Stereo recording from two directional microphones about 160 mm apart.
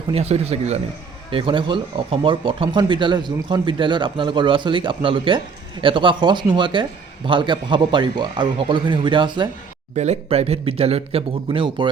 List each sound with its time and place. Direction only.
0.1 s a man's voice: 40° right (ahead or behind)
9.9 s speech: 45° right (ahead or behind)